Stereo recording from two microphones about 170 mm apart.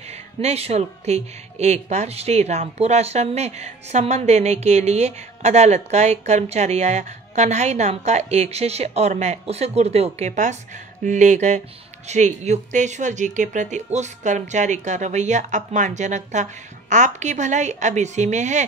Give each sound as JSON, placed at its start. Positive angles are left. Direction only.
{"t": 0.1, "sound": "speech", "side_deg": -40}